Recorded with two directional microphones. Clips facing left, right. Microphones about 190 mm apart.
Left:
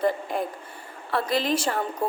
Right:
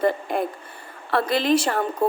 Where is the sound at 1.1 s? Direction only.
70° right (ahead or behind).